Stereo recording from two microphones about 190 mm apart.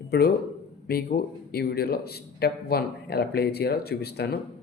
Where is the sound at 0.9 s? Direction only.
55° left (ahead or behind).